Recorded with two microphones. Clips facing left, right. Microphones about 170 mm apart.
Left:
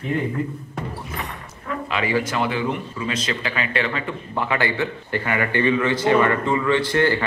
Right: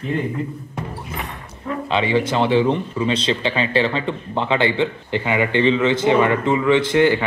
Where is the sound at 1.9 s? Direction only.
25° right (ahead or behind).